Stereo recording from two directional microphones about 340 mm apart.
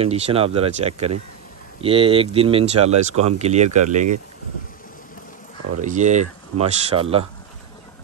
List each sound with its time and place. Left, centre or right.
0.0 s speech: centre
5.8 s speech: right